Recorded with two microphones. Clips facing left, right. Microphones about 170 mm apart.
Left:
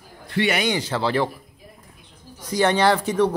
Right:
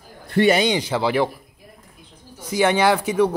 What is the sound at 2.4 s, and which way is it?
Speech, 5° right (ahead or behind).